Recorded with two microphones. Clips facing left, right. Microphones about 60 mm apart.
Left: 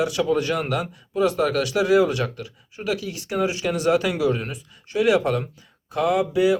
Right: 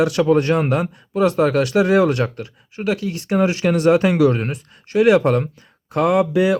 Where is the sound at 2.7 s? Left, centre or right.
Right.